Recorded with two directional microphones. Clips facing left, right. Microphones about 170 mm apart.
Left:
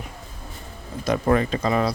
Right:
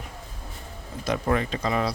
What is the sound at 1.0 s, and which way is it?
Speech, 45° left (ahead or behind).